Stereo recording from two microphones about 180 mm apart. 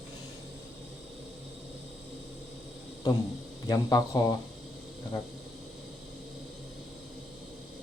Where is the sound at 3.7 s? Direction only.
20° left (ahead or behind).